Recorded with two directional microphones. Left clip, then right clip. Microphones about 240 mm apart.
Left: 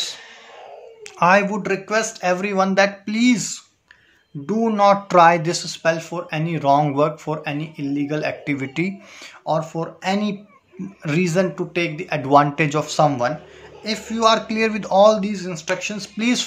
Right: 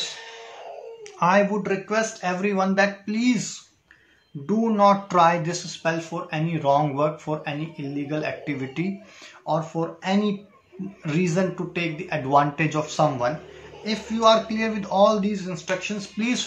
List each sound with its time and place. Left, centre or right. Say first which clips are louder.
1.2 s speech: left 4 dB; left